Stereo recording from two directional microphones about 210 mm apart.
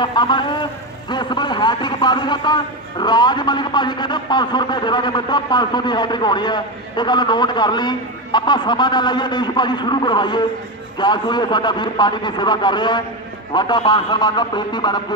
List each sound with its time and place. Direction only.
0.0 s a man's voice: 20° left (ahead or behind)